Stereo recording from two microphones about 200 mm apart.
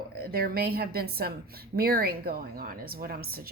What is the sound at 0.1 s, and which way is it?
A woman's voice, 50° right (ahead or behind).